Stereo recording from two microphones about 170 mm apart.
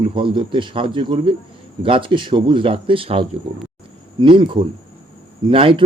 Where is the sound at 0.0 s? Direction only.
30° right (ahead or behind).